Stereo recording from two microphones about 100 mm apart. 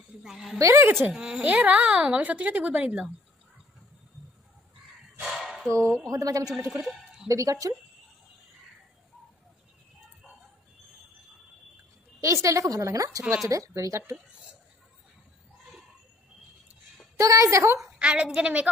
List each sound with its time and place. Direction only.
0.2 s a woman's voice: 5° right (ahead or behind)
0.6 s a woman's voice: 30° right (ahead or behind)
1.0 s speech: 10° right (ahead or behind)
5.2 s dog: centre (ahead or behind)
5.7 s a woman's voice: 30° right (ahead or behind)
12.2 s a woman's voice: 30° right (ahead or behind)
17.2 s a woman's voice: 30° right (ahead or behind)
17.7 s speech: 5° right (ahead or behind)